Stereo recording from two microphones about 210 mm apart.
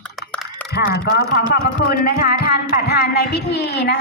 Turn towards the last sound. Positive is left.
turn(degrees=55)  # may be behind; listen again after turning